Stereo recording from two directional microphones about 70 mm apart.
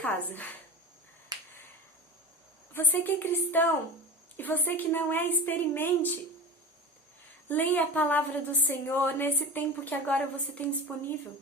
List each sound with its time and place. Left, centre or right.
0.0 s a woman's voice: left
1.3 s finger snapping: right
2.7 s a woman's voice: left
7.4 s a woman's voice: left